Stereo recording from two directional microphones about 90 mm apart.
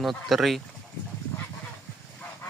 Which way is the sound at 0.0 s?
Centre (ahead or behind).